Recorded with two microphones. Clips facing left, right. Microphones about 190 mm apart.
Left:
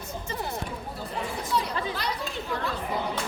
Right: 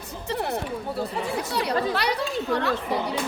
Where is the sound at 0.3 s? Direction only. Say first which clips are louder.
Right 7 dB; 65° right (ahead or behind).